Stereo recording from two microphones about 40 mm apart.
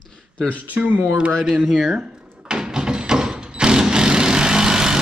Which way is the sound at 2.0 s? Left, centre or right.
Centre.